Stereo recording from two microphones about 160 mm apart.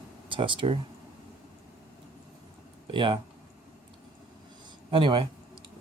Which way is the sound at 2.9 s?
30° right (ahead or behind).